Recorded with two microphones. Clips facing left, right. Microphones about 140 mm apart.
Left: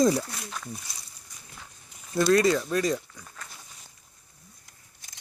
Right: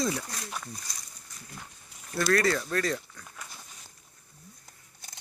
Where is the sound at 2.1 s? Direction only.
20° left (ahead or behind).